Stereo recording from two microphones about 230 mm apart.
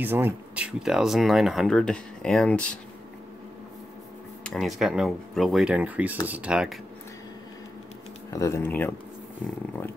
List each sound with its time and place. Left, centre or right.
0.0 s speech: centre
4.5 s speech: centre
8.3 s speech: centre